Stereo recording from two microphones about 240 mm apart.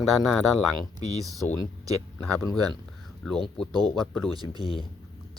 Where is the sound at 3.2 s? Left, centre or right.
Centre.